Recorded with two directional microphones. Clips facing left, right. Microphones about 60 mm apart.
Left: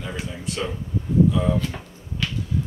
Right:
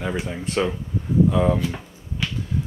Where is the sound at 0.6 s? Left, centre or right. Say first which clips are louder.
Right 7 dB; right.